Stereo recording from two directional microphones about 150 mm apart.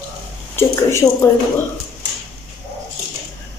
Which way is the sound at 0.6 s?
15° left (ahead or behind).